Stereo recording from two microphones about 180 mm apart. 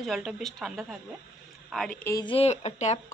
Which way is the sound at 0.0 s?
Centre (ahead or behind).